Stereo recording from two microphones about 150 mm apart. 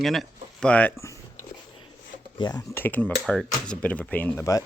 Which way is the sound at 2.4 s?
30° left (ahead or behind).